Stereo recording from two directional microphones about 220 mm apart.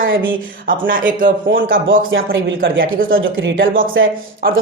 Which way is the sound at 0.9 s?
40° right (ahead or behind).